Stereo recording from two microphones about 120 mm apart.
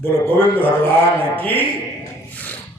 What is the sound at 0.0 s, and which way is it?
A man's voice, 15° left (ahead or behind).